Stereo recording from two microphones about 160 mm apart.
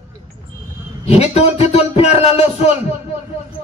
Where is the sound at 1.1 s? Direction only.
40° left (ahead or behind).